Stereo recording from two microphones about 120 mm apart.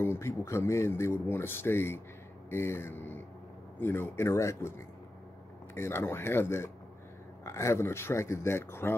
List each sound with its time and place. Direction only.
0.0 s speech: 20° left (ahead or behind)